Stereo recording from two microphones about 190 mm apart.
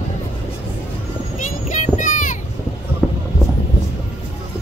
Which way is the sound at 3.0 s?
Centre (ahead or behind).